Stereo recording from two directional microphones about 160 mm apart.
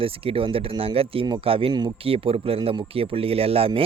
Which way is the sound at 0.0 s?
35° right (ahead or behind).